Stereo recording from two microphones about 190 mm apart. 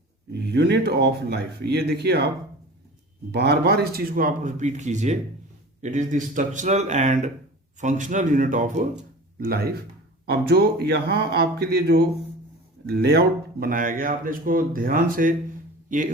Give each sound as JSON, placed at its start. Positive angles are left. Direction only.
{"t": 0.3, "sound": "speech", "side_deg": -60}
{"t": 3.3, "sound": "speech", "side_deg": -60}
{"t": 9.4, "sound": "speech", "side_deg": -55}